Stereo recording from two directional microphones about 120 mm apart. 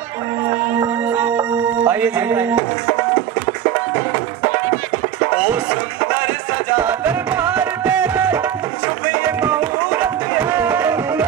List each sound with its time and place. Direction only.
1.1 s music: 15° right (ahead or behind)
2.1 s speech: 15° right (ahead or behind)
5.3 s music: 10° right (ahead or behind)
6.8 s music: 15° right (ahead or behind)
9.4 s music: 15° right (ahead or behind)